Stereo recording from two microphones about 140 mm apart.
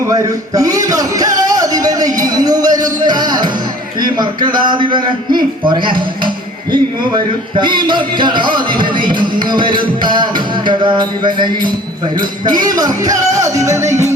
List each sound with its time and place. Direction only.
0.1 s a sound: 25° right (ahead or behind)
3.0 s music: 30° right (ahead or behind)
4.0 s a man's voice: 30° right (ahead or behind)
12.5 s music: 30° right (ahead or behind)